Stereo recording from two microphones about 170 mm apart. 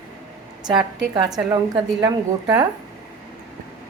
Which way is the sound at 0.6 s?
25° right (ahead or behind).